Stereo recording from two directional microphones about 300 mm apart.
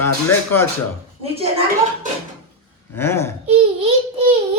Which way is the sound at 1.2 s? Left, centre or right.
Centre.